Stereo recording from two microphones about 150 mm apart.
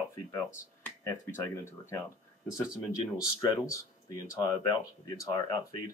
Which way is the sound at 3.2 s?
20° left (ahead or behind).